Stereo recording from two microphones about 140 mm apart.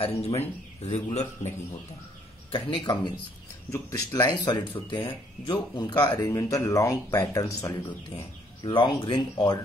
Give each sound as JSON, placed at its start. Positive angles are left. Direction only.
{"t": 0.0, "sound": "a man's voice", "side_deg": 45}
{"t": 2.5, "sound": "speech", "side_deg": 35}
{"t": 8.6, "sound": "speech", "side_deg": 35}